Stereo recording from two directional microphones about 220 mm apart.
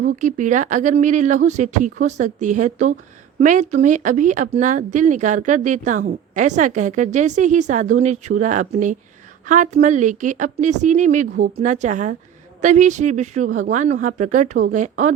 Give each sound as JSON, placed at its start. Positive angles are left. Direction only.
{"t": 0.0, "sound": "speech", "side_deg": -35}